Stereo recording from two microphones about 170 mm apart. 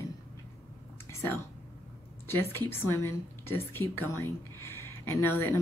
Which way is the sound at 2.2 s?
15° left (ahead or behind).